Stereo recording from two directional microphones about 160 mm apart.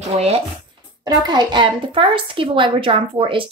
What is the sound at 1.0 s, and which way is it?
Speech, 25° right (ahead or behind).